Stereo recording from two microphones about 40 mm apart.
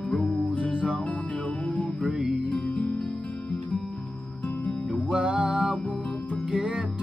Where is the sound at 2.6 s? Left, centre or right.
Left.